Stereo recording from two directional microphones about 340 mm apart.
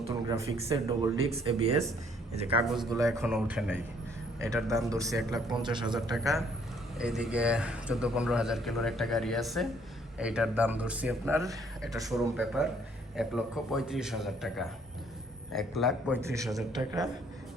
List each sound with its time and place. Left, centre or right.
0.3 s speech: centre
2.6 s a man's voice: centre
6.1 s a man's voice: centre